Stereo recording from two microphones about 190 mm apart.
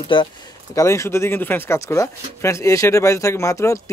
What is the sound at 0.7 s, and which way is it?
Speech, 15° left (ahead or behind).